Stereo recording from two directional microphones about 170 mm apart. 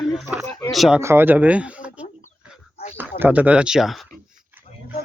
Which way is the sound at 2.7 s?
35° left (ahead or behind).